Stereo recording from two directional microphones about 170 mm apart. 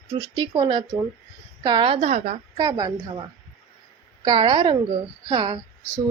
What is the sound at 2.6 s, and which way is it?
Speech, 20° right (ahead or behind).